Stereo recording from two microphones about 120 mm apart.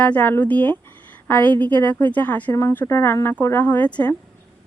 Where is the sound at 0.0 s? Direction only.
10° left (ahead or behind).